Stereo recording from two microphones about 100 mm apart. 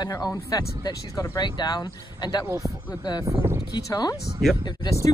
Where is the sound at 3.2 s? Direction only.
30° right (ahead or behind).